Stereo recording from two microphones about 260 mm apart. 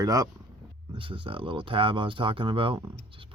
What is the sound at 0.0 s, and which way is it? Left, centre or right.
Speech, centre.